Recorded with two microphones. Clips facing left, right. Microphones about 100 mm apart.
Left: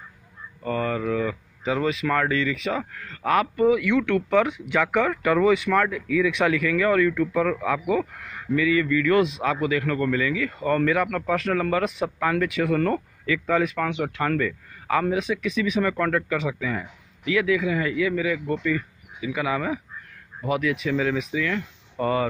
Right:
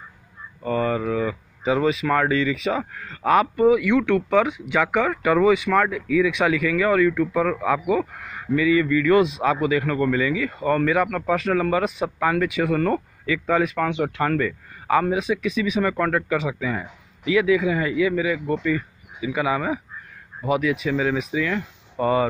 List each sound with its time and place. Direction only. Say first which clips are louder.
0.7 s speech: right 3 dB; 15° right (ahead or behind)